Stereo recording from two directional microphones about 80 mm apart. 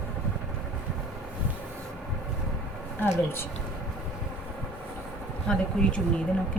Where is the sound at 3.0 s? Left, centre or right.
Left.